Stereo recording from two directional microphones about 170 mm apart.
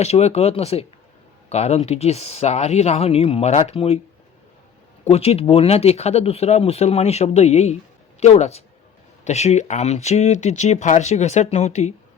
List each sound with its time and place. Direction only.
0.0 s speech: 40° left (ahead or behind)
5.0 s speech: 35° left (ahead or behind)